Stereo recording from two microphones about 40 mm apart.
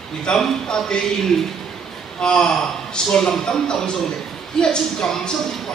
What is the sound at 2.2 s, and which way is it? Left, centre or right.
A man's voice, centre.